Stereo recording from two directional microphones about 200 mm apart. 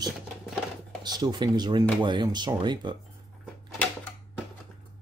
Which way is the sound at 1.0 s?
20° right (ahead or behind).